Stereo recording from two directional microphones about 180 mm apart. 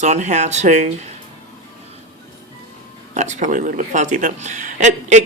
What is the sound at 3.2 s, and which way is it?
Speech, 40° right (ahead or behind).